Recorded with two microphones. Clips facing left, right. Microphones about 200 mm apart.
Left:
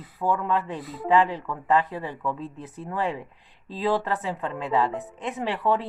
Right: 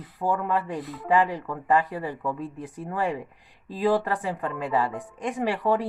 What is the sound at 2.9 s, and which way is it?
Speech, 45° right (ahead or behind).